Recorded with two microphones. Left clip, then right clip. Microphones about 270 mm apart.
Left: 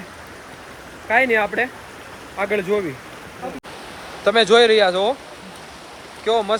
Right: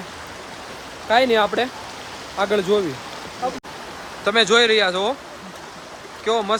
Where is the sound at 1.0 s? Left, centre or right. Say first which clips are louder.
Right 1 dB; centre.